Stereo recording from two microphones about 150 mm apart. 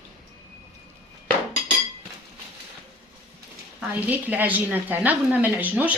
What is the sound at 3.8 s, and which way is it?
A woman's voice, 10° right (ahead or behind).